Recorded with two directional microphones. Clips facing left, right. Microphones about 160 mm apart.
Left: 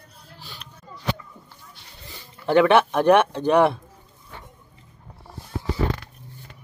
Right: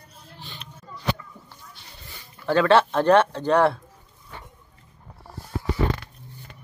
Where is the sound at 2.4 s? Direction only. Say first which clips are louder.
Left 2 dB; 20° left (ahead or behind).